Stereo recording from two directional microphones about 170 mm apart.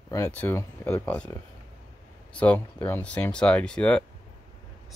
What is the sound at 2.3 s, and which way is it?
Speech, 5° left (ahead or behind).